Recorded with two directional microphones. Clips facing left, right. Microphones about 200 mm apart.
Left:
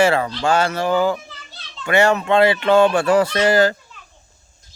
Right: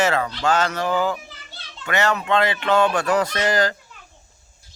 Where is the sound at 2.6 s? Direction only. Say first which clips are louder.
Left 5 dB; 25° left (ahead or behind).